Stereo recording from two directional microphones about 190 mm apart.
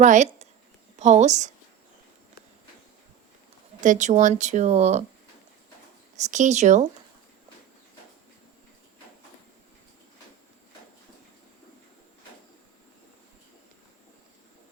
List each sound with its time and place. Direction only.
0.0 s speech: 40° right (ahead or behind)
3.8 s speech: 40° right (ahead or behind)
6.1 s speech: 40° right (ahead or behind)